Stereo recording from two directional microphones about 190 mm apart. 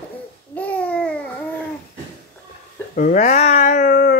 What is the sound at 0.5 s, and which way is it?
Babbling, 5° left (ahead or behind).